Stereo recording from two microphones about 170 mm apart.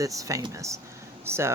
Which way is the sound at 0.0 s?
20° right (ahead or behind).